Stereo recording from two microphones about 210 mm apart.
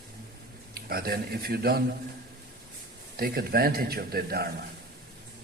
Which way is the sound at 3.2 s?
45° right (ahead or behind).